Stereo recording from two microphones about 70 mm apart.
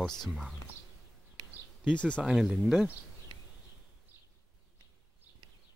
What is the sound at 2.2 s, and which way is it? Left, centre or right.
Speech, centre.